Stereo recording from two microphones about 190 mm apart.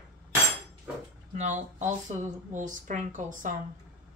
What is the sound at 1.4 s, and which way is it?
Speech, 40° right (ahead or behind).